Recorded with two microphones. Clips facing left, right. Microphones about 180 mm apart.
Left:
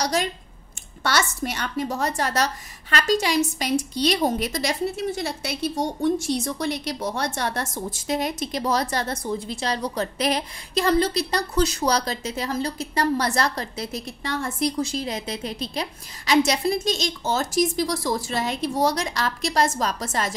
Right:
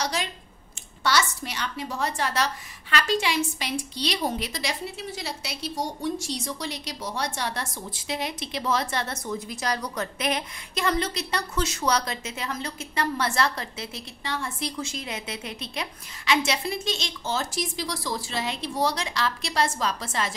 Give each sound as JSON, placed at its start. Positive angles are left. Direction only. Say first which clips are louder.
{"t": 0.0, "sound": "a woman's voice", "louder": "left 5 dB", "side_deg": 45}